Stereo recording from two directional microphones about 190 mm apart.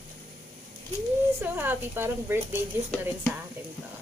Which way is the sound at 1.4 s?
10° right (ahead or behind).